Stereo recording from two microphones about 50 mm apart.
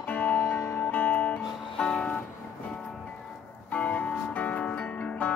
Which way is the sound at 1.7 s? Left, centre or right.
Centre.